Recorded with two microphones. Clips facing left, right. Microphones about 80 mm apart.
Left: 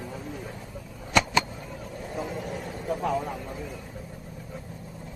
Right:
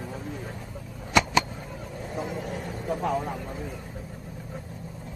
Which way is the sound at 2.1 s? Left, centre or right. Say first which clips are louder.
Right 1 dB; right.